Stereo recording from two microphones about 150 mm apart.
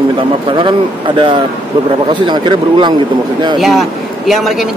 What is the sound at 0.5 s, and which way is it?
A man's voice, 35° right (ahead or behind).